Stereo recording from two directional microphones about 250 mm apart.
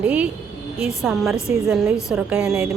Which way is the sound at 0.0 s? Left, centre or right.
Centre.